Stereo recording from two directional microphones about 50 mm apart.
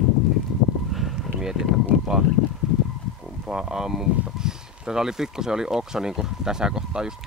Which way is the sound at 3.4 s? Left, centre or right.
Centre.